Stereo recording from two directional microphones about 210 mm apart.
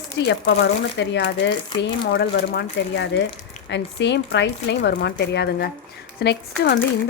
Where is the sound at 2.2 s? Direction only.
55° left (ahead or behind).